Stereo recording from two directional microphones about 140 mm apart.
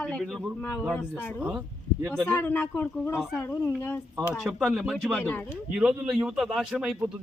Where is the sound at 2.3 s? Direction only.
15° left (ahead or behind).